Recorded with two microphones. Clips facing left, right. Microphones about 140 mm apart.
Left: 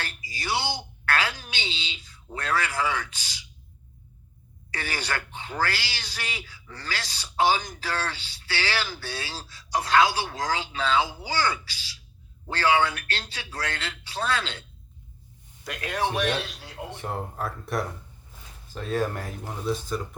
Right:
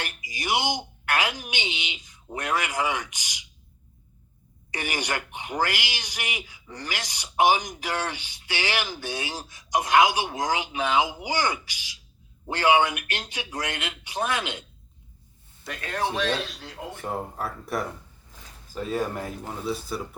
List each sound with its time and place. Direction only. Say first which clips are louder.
0.0 s speech: right 2 dB; 20° right (ahead or behind)
4.7 s speech: right 2 dB; 15° right (ahead or behind)
15.6 s speech: left 1 dB; centre (ahead or behind)
16.1 s a man's voice: even; 15° left (ahead or behind)
17.0 s speech: right 1 dB; 5° right (ahead or behind)